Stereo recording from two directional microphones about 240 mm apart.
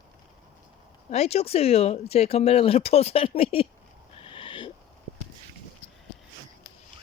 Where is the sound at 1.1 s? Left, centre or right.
Left.